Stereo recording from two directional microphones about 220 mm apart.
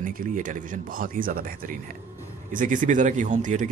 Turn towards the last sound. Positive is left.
turn(degrees=-35)  # may be behind; listen again after turning